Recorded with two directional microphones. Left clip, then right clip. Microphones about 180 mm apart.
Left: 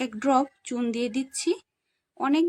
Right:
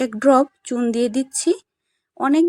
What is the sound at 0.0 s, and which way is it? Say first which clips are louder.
A woman's voice: right 8 dB; 20° right (ahead or behind).